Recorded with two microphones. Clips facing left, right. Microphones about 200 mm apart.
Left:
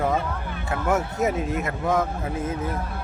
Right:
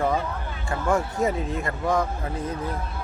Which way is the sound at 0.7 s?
5° left (ahead or behind).